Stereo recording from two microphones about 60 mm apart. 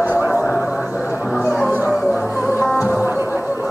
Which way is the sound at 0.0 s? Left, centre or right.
Right.